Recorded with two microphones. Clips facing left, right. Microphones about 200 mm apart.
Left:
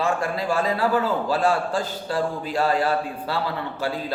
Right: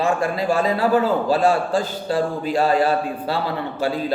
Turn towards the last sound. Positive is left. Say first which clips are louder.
# right 4 dB
turn(degrees=-20)  # may be behind; listen again after turning